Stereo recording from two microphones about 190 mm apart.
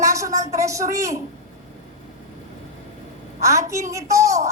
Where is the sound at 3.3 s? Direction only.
15° right (ahead or behind).